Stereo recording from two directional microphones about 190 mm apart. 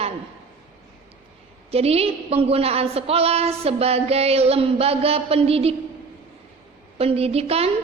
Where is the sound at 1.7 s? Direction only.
30° right (ahead or behind).